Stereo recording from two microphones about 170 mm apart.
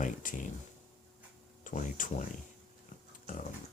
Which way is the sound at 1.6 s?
50° left (ahead or behind).